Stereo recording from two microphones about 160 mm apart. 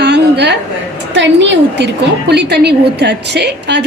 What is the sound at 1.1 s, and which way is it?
A woman's voice, 90° right.